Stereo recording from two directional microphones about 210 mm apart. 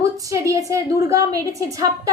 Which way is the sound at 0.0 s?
15° right (ahead or behind).